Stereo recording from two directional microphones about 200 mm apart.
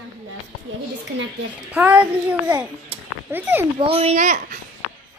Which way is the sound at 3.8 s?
30° right (ahead or behind).